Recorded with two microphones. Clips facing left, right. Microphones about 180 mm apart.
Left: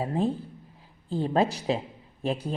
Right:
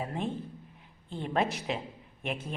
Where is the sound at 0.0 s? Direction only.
35° left (ahead or behind).